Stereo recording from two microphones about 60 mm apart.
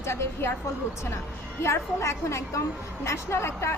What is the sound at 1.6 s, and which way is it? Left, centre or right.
A woman's voice, left.